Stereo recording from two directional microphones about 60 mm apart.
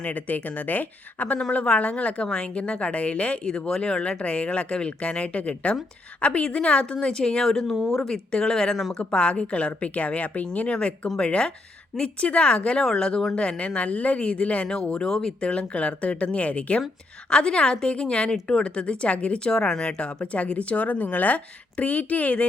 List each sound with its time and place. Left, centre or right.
0.0 s a woman's voice: left